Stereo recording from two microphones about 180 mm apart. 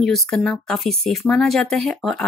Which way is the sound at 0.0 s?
Centre (ahead or behind).